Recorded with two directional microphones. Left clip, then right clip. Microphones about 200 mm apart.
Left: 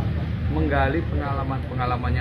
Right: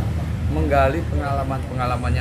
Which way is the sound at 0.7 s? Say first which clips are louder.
Right 5 dB; 35° right (ahead or behind).